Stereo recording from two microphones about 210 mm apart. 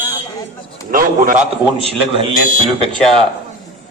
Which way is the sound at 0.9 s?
40° right (ahead or behind).